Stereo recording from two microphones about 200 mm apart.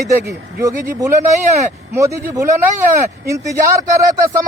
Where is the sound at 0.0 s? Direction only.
15° right (ahead or behind).